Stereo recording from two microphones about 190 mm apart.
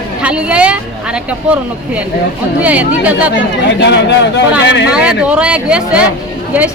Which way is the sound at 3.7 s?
65° left (ahead or behind).